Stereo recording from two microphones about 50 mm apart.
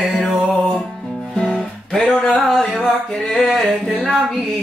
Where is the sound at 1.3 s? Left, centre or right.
Centre.